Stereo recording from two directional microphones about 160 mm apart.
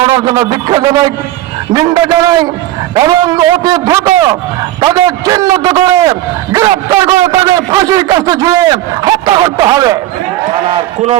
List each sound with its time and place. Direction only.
0.0 s a man's voice: 25° right (ahead or behind)